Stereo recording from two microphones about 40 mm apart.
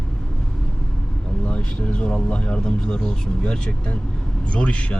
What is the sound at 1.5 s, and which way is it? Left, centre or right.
Speech, left.